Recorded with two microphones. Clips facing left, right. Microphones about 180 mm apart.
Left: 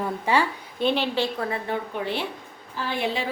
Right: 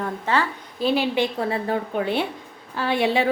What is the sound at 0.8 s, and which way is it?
Speech, 5° right (ahead or behind).